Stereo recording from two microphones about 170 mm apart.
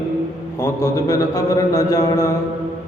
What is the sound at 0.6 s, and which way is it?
Mantra, 15° left (ahead or behind).